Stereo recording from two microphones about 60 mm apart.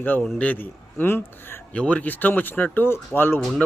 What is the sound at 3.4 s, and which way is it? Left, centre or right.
Speech, centre.